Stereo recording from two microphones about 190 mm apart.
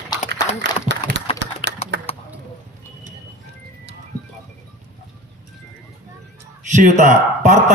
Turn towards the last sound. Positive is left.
turn(degrees=-40)  # may be behind; listen again after turning